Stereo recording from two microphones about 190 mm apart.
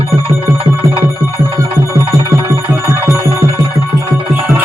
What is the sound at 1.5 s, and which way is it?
Music, 15° right (ahead or behind).